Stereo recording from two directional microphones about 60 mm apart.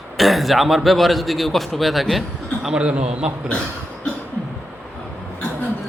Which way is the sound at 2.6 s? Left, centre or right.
Centre.